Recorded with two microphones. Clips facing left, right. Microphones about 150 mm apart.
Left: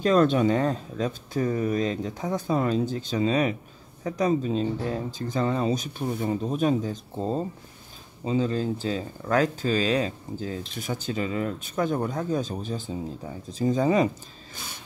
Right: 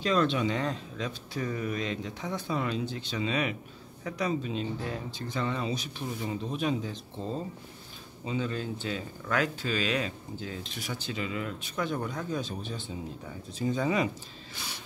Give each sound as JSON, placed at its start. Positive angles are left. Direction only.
{"t": 0.0, "sound": "speech", "side_deg": 45}